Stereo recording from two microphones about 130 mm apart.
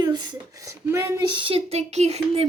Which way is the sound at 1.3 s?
40° right (ahead or behind).